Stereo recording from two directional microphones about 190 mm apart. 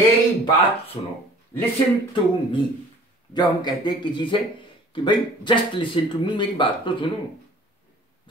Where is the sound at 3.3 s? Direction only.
25° left (ahead or behind).